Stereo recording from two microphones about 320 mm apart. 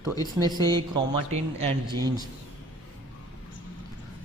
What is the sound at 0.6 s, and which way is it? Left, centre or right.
Mantra, centre.